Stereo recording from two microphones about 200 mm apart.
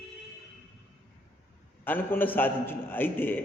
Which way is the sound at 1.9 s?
10° left (ahead or behind).